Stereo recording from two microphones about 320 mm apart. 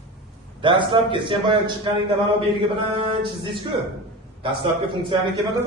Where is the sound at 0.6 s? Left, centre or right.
Centre.